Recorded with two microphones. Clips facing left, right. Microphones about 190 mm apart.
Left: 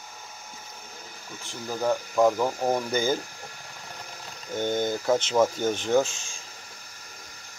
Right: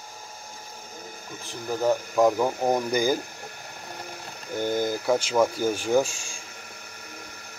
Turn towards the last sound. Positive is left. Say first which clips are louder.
# right 1 dB
turn(degrees=-10)  # may be behind; listen again after turning